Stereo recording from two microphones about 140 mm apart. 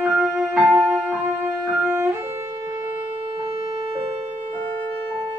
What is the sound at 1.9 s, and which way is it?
Music, 15° right (ahead or behind).